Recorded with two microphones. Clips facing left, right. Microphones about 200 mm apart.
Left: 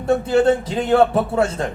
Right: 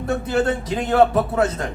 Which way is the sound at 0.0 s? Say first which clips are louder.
Left 5 dB; 25° left (ahead or behind).